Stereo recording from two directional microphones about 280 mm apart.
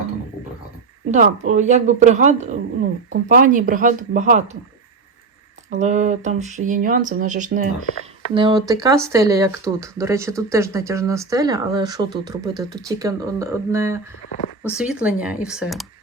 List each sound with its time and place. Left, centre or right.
1.1 s speech: right
5.7 s speech: right
8.3 s speech: centre